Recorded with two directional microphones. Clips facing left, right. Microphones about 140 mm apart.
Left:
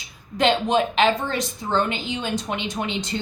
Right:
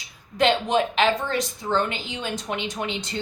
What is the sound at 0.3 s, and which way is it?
A woman's voice, 25° left (ahead or behind).